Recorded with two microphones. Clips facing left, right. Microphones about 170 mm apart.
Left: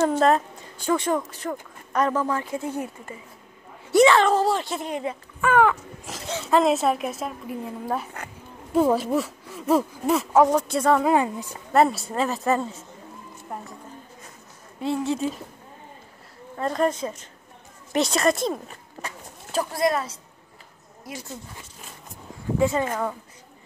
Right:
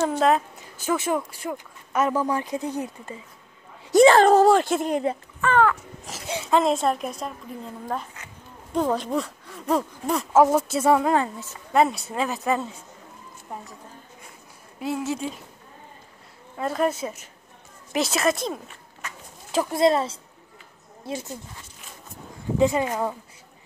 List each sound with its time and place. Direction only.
0.0 s speech: centre (ahead or behind); by 2.8 s 15° right (ahead or behind)
3.9 s a woman's voice: 40° right (ahead or behind)
5.4 s speech: 10° left (ahead or behind)
6.0 s a sound: 10° right (ahead or behind)
6.5 s speech: centre (ahead or behind)
11.1 s speech: 15° left (ahead or behind)
11.7 s speech: centre (ahead or behind)
14.8 s speech: 5° right (ahead or behind)
16.5 s a woman's voice: 5° right (ahead or behind)
19.5 s speech: 25° right (ahead or behind)
22.6 s a woman's voice: 15° right (ahead or behind)